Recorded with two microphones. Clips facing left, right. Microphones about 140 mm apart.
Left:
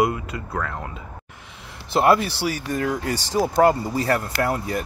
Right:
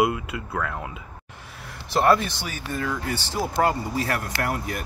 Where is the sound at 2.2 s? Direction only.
35° left (ahead or behind).